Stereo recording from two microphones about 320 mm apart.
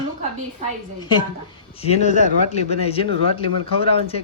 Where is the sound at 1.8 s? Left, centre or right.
Left.